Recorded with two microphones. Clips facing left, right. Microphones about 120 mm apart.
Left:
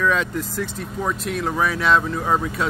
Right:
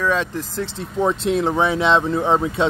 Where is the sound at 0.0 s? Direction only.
30° right (ahead or behind).